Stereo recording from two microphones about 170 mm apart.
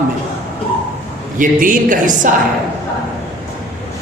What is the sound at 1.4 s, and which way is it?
Speech, 50° right (ahead or behind).